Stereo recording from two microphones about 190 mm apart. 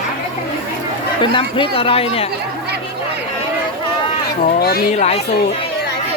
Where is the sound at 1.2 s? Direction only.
25° left (ahead or behind).